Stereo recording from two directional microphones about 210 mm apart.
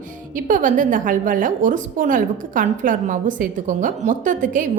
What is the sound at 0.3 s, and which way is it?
A woman's voice, 40° right (ahead or behind).